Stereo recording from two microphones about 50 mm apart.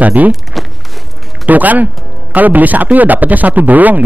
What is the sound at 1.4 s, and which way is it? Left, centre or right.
Speech, right.